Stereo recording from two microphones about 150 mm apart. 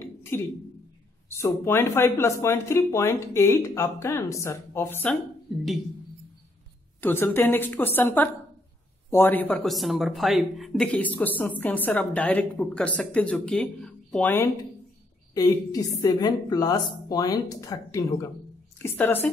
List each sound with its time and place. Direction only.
0.3 s a woman's voice: 15° left (ahead or behind)
5.5 s speech: centre (ahead or behind)
7.0 s a woman's voice: 15° left (ahead or behind)
9.6 s a woman's voice: centre (ahead or behind)
15.3 s a woman's voice: 25° left (ahead or behind)